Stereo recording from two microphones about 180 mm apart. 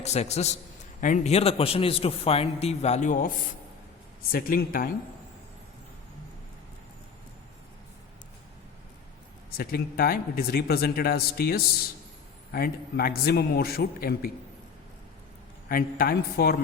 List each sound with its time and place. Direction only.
0.0 s a man's voice: 40° left (ahead or behind)
9.6 s speech: 55° left (ahead or behind)
15.7 s speech: 55° left (ahead or behind)